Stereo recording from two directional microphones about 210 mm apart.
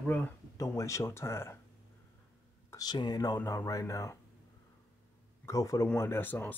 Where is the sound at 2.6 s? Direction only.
20° left (ahead or behind).